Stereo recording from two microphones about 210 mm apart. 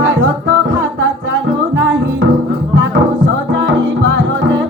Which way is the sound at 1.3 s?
60° right (ahead or behind).